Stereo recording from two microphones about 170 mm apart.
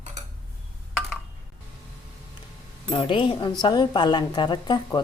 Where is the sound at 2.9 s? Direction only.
30° left (ahead or behind).